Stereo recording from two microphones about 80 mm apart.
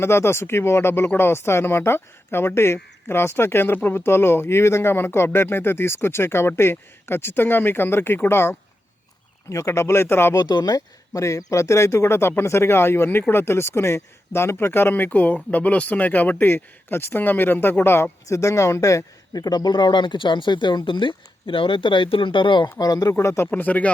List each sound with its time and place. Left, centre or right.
0.0 s speech: left
10.3 s speech: left
22.8 s speech: left
23.1 s speech: left
23.5 s speech: centre